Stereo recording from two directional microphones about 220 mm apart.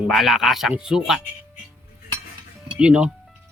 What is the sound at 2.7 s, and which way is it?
Speech, 5° right (ahead or behind).